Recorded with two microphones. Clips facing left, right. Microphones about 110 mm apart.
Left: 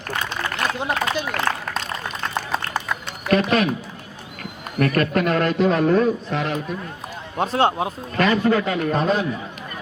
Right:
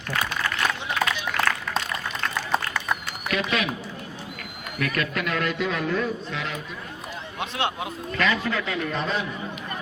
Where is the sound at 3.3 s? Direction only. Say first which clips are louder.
Left 8 dB; 40° left (ahead or behind).